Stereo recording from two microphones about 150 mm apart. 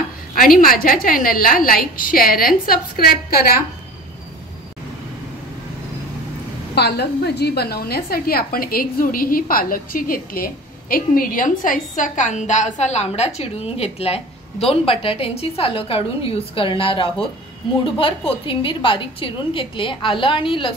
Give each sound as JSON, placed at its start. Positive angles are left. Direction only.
{"t": 0.3, "sound": "a woman's voice", "side_deg": 70}
{"t": 6.7, "sound": "a woman's voice", "side_deg": 90}